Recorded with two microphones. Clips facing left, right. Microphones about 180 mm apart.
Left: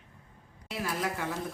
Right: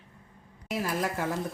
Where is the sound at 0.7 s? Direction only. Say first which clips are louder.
Right 3 dB; 45° right (ahead or behind).